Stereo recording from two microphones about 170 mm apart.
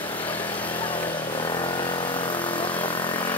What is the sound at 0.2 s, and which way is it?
Vehicle, 10° left (ahead or behind).